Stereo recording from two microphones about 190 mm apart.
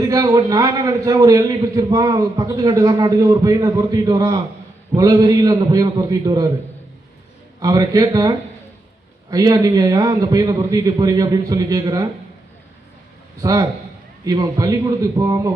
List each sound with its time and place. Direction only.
0.1 s a man's voice: 20° right (ahead or behind)
7.6 s a man's voice: 20° right (ahead or behind)
13.4 s a man's voice: 20° right (ahead or behind)